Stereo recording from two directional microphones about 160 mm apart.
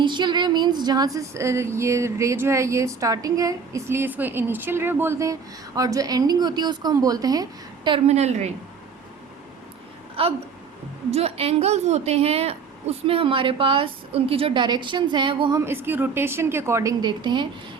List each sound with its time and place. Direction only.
0.0 s a sound: 30° right (ahead or behind)
7.9 s a woman's voice: 40° right (ahead or behind)
10.2 s a woman's voice: 35° right (ahead or behind)
15.6 s a woman's voice: 15° right (ahead or behind)